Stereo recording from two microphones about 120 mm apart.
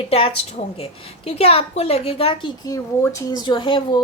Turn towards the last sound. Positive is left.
turn(degrees=45)  # may be behind; listen again after turning